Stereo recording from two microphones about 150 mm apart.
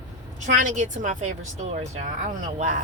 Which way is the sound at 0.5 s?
55° right (ahead or behind).